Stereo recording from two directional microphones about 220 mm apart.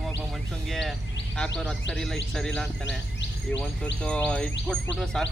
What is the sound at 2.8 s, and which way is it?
Insect, 55° left (ahead or behind).